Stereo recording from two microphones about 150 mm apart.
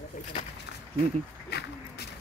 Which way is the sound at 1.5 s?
90° left.